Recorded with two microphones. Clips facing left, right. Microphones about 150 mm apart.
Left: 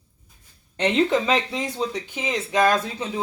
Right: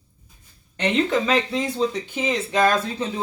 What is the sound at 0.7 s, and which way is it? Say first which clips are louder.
Speech: left 1 dB; 20° left (ahead or behind).